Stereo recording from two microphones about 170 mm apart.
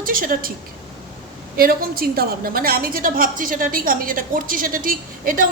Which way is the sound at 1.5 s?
60° right (ahead or behind).